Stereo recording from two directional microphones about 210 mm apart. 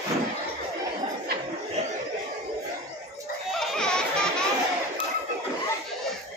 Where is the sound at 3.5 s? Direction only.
Centre (ahead or behind).